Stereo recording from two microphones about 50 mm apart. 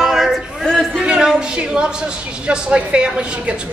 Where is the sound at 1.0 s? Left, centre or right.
Centre.